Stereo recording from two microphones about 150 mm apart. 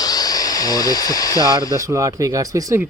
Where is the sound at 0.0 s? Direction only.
25° left (ahead or behind).